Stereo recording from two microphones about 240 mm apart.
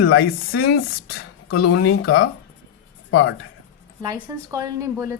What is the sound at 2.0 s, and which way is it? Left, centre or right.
Speech, left.